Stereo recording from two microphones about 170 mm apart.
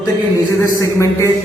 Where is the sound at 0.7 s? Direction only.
15° left (ahead or behind).